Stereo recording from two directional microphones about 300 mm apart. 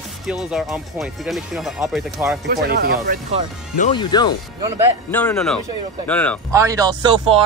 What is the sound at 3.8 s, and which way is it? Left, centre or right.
Speech, centre.